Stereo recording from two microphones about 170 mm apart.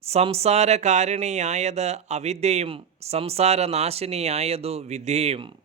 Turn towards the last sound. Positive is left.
turn(degrees=-35)  # may be behind; listen again after turning